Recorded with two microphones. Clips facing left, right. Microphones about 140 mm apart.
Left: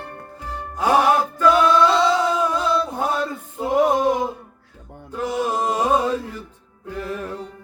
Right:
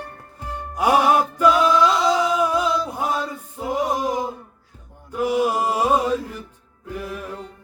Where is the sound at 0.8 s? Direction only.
10° right (ahead or behind).